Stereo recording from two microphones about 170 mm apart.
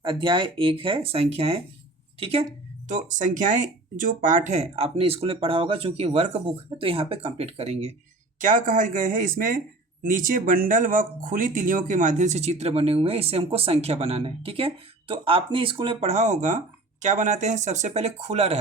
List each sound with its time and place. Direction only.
0.0 s speech: 30° right (ahead or behind)
2.9 s speech: 45° right (ahead or behind)
8.4 s speech: 50° right (ahead or behind)